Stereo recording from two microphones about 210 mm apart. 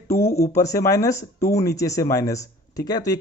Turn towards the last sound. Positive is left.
turn(degrees=20)  # may be behind; listen again after turning